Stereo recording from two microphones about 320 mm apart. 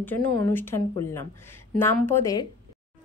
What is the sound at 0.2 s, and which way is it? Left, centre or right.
Speech, right.